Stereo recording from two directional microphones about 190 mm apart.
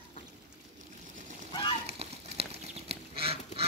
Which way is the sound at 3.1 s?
30° right (ahead or behind).